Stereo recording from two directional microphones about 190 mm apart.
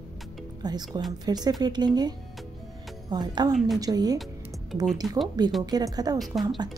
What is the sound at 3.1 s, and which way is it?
A woman's voice, 25° right (ahead or behind).